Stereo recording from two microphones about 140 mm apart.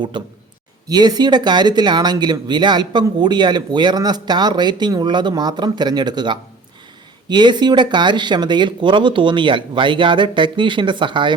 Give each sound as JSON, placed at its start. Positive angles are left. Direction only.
{"t": 0.1, "sound": "speech", "side_deg": -35}